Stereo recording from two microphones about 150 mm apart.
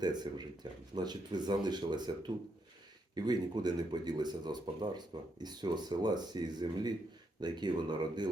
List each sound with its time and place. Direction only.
0.0 s speech: 30° right (ahead or behind)